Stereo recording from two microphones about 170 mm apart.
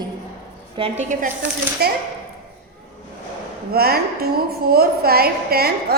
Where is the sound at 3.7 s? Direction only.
65° right (ahead or behind).